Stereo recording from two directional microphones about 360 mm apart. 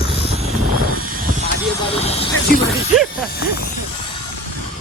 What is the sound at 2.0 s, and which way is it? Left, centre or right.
Vehicle, centre.